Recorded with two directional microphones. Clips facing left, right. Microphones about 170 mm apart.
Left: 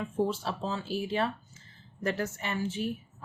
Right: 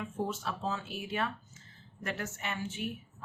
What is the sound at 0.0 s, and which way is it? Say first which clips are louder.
A woman's voice: left 6 dB; 30° left (ahead or behind).